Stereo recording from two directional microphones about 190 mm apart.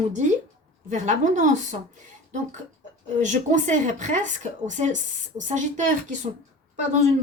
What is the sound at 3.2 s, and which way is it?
A woman's voice, 40° right (ahead or behind).